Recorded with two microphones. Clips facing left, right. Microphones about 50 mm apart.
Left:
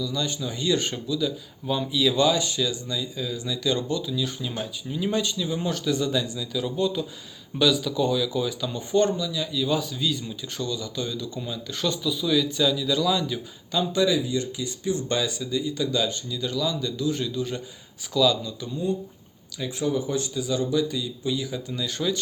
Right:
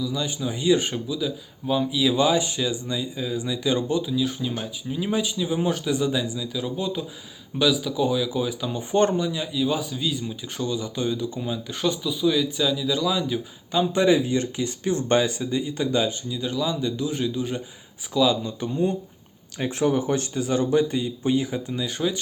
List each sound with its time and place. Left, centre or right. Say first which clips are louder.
0.0 s speech: right 1 dB; centre
4.2 s speech: right 3 dB; centre
8.9 s speech: right 2 dB; right
9.4 s a man's voice: right 1 dB; centre
9.6 s speech: left 1 dB; centre
13.9 s speech: right 3 dB; right
14.2 s speech: right 3 dB; right
16.0 s a man's voice: right 2 dB; centre
18.4 s speech: right 3 dB; right
21.7 s speech: right 1 dB; centre